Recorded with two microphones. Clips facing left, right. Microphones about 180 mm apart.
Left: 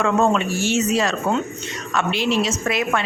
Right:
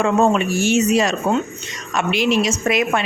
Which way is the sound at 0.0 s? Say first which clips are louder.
Right 2 dB; 15° right (ahead or behind).